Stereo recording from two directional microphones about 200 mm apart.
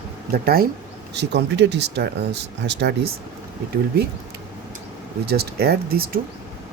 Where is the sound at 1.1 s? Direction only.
60° right (ahead or behind).